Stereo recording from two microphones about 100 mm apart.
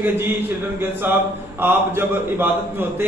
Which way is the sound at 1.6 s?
20° right (ahead or behind).